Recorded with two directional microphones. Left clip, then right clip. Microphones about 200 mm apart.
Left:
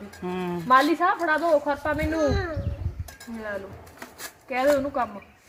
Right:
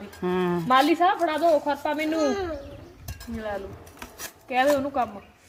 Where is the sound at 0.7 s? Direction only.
Centre (ahead or behind).